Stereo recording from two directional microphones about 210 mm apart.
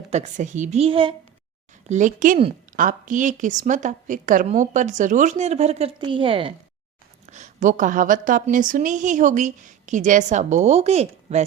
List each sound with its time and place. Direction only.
0.1 s a woman's voice: 35° right (ahead or behind)
1.9 s a woman's voice: 35° right (ahead or behind)